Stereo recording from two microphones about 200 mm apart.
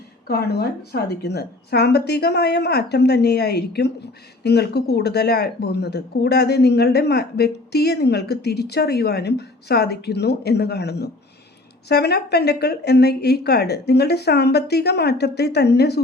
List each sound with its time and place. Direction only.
0.3 s speech: 55° left (ahead or behind)